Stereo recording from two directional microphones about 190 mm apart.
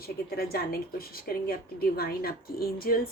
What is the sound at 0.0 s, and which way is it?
A woman's voice, 55° left (ahead or behind).